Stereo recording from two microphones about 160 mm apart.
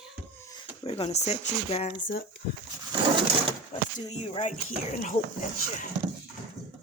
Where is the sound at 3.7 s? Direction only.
40° left (ahead or behind).